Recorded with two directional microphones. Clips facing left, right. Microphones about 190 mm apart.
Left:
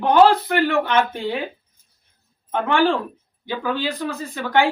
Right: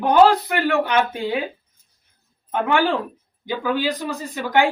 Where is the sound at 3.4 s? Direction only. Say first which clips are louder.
Right 2 dB; 10° right (ahead or behind).